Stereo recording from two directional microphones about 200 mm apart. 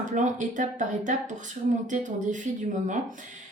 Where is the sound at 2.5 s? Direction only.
35° right (ahead or behind).